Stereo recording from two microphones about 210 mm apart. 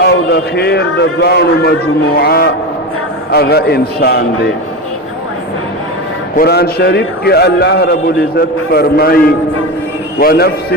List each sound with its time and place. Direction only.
0.0 s a man's voice: 50° left (ahead or behind)
6.3 s a man's voice: 50° left (ahead or behind)